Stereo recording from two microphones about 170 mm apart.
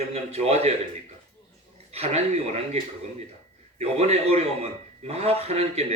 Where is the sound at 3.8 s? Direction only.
40° right (ahead or behind).